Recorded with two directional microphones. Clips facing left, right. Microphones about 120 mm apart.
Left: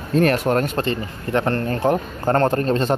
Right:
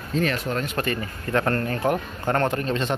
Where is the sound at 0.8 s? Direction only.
25° left (ahead or behind).